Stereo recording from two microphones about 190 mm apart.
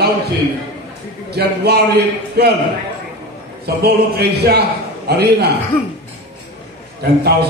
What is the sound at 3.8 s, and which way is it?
A man's voice, 55° right (ahead or behind).